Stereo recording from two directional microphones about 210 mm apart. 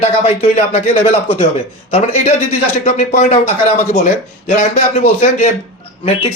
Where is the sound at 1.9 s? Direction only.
30° left (ahead or behind).